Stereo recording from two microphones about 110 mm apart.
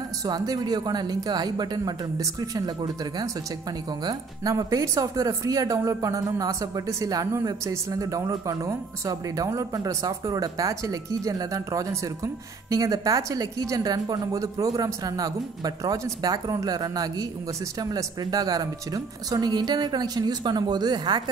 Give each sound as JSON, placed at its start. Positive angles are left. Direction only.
{"t": 0.2, "sound": "speech", "side_deg": -35}